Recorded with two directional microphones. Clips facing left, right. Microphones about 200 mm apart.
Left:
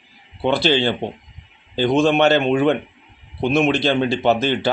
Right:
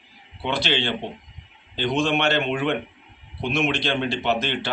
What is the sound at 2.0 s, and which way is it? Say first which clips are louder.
A man's voice: left 7 dB; 40° left (ahead or behind).